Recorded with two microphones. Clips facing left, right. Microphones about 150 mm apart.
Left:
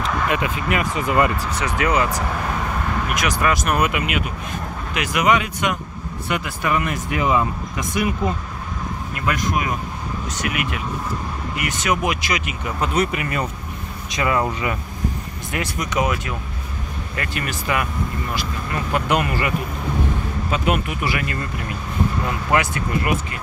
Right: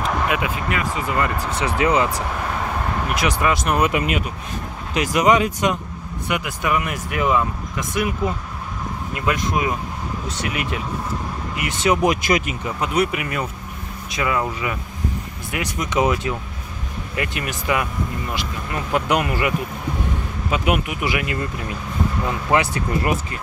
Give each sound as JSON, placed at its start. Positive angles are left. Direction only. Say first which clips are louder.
{"t": 0.0, "sound": "a sound", "louder": "even", "side_deg": -5}
{"t": 0.7, "sound": "speech", "louder": "left 2 dB", "side_deg": 15}
{"t": 1.4, "sound": "speech", "louder": "right 2 dB", "side_deg": -25}
{"t": 6.2, "sound": "speech", "louder": "even", "side_deg": -15}
{"t": 7.2, "sound": "speech", "louder": "even", "side_deg": 0}
{"t": 9.1, "sound": "speech", "louder": "right 1 dB", "side_deg": -20}
{"t": 12.8, "sound": "speech", "louder": "even", "side_deg": -10}
{"t": 15.8, "sound": "speech", "louder": "right 3 dB", "side_deg": -25}
{"t": 22.5, "sound": "speech", "louder": "right 1 dB", "side_deg": -30}